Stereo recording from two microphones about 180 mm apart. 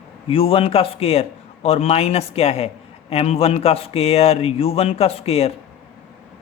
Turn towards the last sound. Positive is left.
turn(degrees=35)  # may be behind; listen again after turning